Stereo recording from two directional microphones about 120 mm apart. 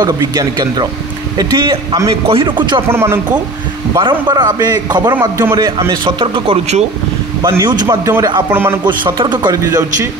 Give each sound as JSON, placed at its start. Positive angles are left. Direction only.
{"t": 0.0, "sound": "a man's voice", "side_deg": -35}
{"t": 2.9, "sound": "speech", "side_deg": -20}
{"t": 4.0, "sound": "a man's voice", "side_deg": -40}
{"t": 5.4, "sound": "speech", "side_deg": -25}
{"t": 5.9, "sound": "a man's voice", "side_deg": -40}
{"t": 7.6, "sound": "a man's voice", "side_deg": -40}